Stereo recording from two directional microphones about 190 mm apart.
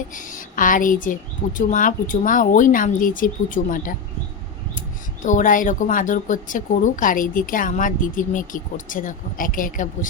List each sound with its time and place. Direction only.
0.1 s speech: 45° left (ahead or behind)
5.2 s speech: 40° left (ahead or behind)